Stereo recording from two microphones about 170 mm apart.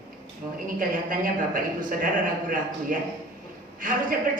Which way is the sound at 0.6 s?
55° right (ahead or behind).